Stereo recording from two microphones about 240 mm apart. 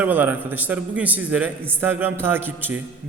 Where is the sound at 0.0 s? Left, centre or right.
Centre.